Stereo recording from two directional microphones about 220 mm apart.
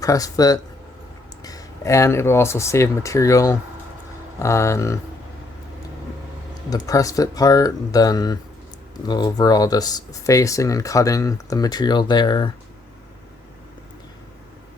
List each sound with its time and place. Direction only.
0.0 s speech: 15° left (ahead or behind)
6.7 s speech: 15° left (ahead or behind)